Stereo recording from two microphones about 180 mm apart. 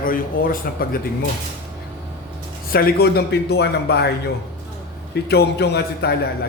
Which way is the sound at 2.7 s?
55° left (ahead or behind).